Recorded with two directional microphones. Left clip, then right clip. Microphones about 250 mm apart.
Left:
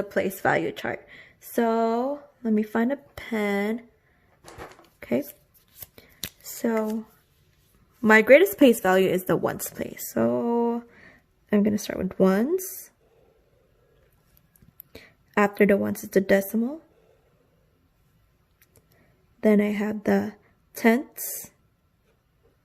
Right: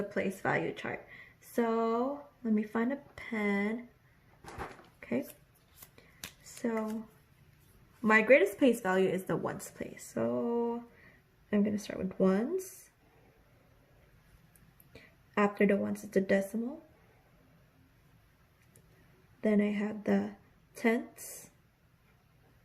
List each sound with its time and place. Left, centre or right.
0.1 s speech: left
4.9 s a sound: left
6.0 s shuffling cards: left
8.0 s speech: left
14.9 s speech: left
19.4 s speech: left